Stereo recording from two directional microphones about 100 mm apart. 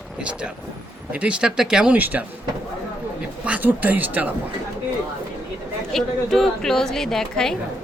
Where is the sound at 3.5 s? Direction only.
15° right (ahead or behind).